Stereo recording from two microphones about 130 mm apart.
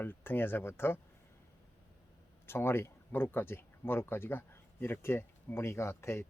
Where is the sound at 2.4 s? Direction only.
20° left (ahead or behind).